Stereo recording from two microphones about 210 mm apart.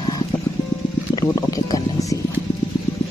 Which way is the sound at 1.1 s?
20° left (ahead or behind).